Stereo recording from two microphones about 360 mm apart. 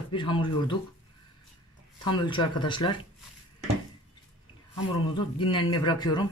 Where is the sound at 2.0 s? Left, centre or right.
Centre.